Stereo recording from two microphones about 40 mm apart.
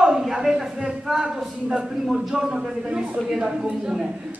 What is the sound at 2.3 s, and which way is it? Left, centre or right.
A man's voice, centre.